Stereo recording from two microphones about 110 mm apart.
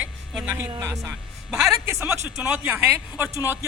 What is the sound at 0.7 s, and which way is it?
Speech, 25° right (ahead or behind).